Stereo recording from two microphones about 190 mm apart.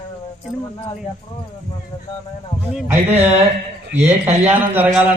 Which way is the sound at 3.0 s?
30° right (ahead or behind).